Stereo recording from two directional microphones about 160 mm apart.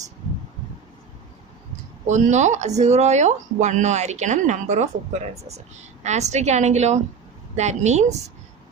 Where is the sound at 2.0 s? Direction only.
50° right (ahead or behind).